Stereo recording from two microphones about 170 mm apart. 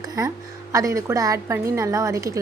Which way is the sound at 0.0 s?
20° right (ahead or behind).